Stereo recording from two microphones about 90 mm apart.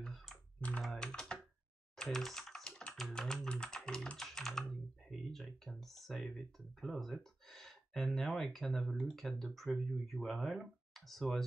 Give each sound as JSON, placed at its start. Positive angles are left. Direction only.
{"t": 0.0, "sound": "computer keyboard", "side_deg": 0}
{"t": 0.6, "sound": "speech", "side_deg": 15}
{"t": 2.0, "sound": "typing", "side_deg": 5}
{"t": 5.7, "sound": "a sound", "side_deg": 0}
{"t": 8.5, "sound": "speech", "side_deg": 5}